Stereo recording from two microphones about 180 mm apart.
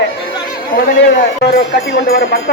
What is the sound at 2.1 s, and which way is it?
Speech, 60° left (ahead or behind).